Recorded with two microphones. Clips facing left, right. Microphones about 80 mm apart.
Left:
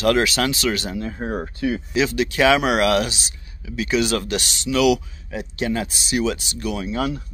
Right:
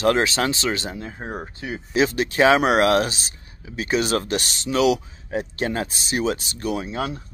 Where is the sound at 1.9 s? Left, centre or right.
Right.